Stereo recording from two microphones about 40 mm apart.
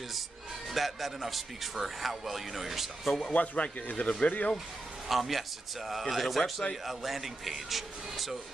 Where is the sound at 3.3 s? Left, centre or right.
Left.